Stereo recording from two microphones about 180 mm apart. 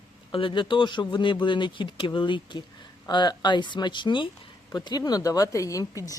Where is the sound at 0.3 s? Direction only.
30° left (ahead or behind).